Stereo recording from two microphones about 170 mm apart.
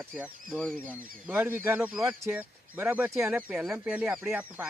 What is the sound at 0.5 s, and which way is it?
Chicken, 5° left (ahead or behind).